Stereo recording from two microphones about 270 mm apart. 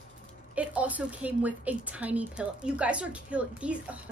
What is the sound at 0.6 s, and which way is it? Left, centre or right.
A woman's voice, centre.